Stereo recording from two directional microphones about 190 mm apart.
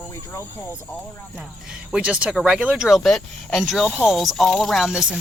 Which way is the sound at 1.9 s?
5° right (ahead or behind).